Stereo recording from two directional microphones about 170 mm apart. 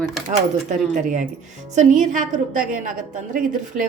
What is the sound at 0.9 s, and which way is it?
A woman's voice, 45° right (ahead or behind).